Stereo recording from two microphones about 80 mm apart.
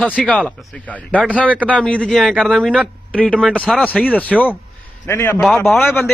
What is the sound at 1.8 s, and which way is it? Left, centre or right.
Speech, centre.